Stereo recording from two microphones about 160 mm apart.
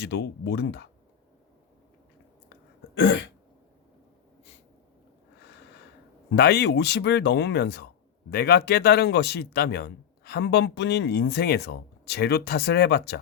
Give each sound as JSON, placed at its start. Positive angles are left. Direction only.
{"t": 0.0, "sound": "speech", "side_deg": 90}
{"t": 6.3, "sound": "speech", "side_deg": 85}